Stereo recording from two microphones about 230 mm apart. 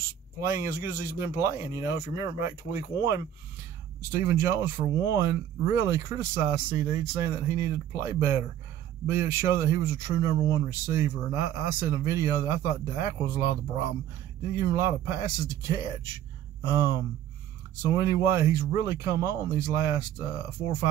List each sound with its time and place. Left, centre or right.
0.4 s speech: centre
4.2 s speech: centre